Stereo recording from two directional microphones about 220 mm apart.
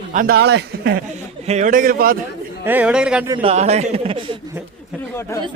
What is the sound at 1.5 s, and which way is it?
Speech, 35° right (ahead or behind).